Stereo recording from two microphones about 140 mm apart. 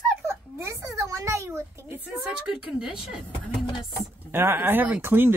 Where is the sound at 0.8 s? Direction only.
25° right (ahead or behind).